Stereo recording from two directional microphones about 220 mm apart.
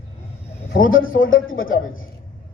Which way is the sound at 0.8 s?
65° left (ahead or behind).